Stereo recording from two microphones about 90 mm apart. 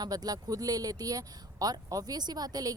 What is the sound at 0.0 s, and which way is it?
Speech, 45° right (ahead or behind).